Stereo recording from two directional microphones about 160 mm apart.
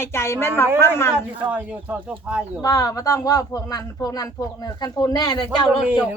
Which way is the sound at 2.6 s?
20° left (ahead or behind).